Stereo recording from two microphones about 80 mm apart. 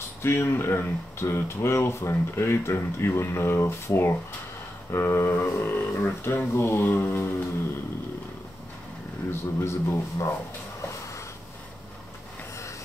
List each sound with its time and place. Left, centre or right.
0.2 s speech: left
9.3 s speech: left
10.8 s a sound: left